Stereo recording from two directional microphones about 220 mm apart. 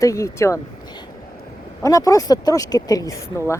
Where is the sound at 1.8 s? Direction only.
15° left (ahead or behind).